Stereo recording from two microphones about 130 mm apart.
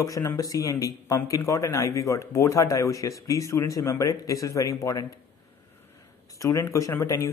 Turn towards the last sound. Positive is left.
turn(degrees=25)  # may be behind; listen again after turning